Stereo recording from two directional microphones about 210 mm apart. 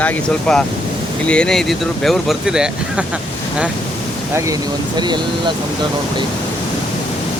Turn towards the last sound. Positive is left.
turn(degrees=-20)  # may be behind; listen again after turning